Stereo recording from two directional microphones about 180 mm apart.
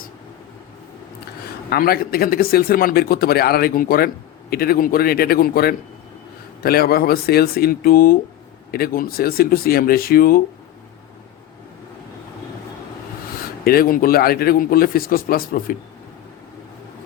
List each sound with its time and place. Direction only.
1.7 s speech: 55° left (ahead or behind)
13.7 s speech: 55° left (ahead or behind)